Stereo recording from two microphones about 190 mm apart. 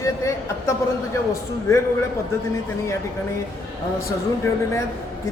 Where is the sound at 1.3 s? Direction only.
15° left (ahead or behind).